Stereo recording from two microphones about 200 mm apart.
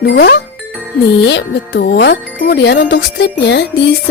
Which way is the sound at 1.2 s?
55° left (ahead or behind).